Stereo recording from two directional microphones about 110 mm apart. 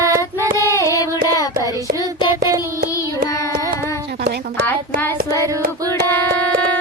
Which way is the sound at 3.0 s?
30° left (ahead or behind).